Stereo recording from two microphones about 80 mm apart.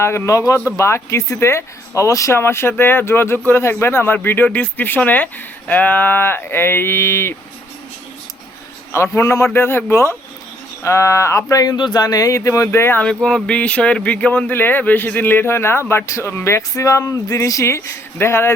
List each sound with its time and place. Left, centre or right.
0.0 s speech: left
8.9 s speech: left
11.9 s speech: left
12.6 s speech: left
13.2 s speech: centre; by 18.5 s left